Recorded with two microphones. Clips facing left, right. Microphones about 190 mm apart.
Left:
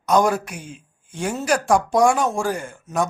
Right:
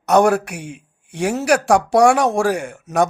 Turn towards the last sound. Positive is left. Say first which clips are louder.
# right 5 dB
turn(degrees=-70)  # may be behind; listen again after turning